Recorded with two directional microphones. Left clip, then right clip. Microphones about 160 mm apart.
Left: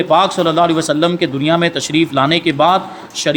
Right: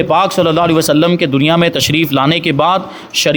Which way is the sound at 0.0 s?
55° right (ahead or behind).